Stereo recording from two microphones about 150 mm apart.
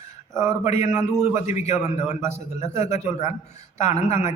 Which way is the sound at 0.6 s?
50° left (ahead or behind).